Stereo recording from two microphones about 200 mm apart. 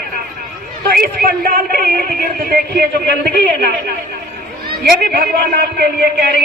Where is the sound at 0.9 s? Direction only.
50° right (ahead or behind).